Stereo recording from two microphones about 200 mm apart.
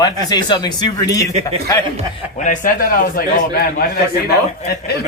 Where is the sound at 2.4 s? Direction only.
40° left (ahead or behind).